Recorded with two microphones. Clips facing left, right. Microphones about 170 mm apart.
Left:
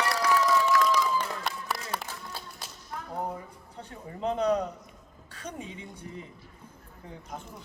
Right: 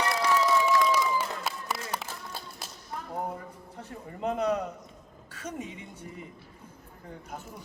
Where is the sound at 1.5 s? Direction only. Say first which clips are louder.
Even; centre (ahead or behind).